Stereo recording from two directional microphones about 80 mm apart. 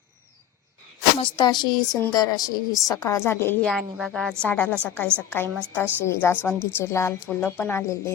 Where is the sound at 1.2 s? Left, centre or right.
Left.